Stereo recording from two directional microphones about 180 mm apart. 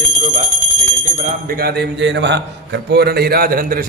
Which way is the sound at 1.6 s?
70° right (ahead or behind).